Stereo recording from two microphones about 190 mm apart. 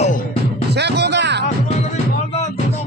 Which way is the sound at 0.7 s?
60° right (ahead or behind).